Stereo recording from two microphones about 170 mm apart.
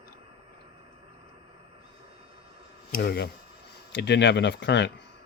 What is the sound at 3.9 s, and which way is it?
Speech, 90° left.